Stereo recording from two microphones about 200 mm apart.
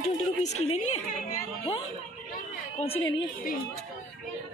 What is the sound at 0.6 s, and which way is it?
Speech, 30° left (ahead or behind).